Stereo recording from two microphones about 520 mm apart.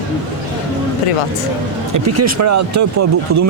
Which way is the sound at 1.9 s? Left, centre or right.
Right.